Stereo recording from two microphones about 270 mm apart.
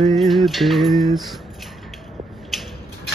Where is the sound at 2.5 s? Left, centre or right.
Centre.